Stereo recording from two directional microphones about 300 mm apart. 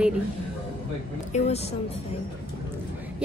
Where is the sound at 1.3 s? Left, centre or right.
Left.